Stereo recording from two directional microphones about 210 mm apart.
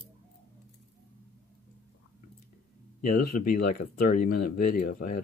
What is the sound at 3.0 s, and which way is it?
Speech, 40° left (ahead or behind).